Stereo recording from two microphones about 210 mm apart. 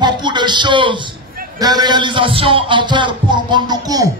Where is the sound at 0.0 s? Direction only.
20° right (ahead or behind).